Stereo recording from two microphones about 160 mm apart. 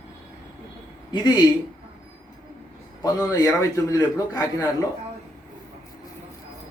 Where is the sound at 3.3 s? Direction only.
20° left (ahead or behind).